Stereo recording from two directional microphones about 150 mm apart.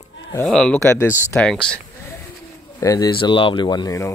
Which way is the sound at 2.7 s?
25° left (ahead or behind).